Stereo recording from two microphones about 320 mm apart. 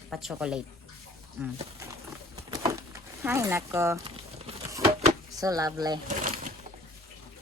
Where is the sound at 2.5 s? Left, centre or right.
Centre.